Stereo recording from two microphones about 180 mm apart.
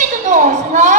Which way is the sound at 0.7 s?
45° right (ahead or behind).